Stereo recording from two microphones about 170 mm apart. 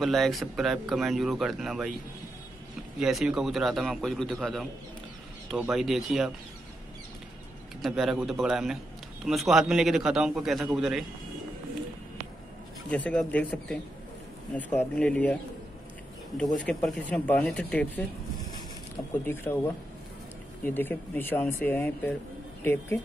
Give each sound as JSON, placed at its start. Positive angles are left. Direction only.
{"t": 0.0, "sound": "speech", "side_deg": 0}
{"t": 3.0, "sound": "speech", "side_deg": -5}
{"t": 5.7, "sound": "speech", "side_deg": 0}
{"t": 7.8, "sound": "speech", "side_deg": 0}
{"t": 12.9, "sound": "speech", "side_deg": 5}
{"t": 16.5, "sound": "speech", "side_deg": 0}
{"t": 19.2, "sound": "speech", "side_deg": 15}
{"t": 20.6, "sound": "speech", "side_deg": 10}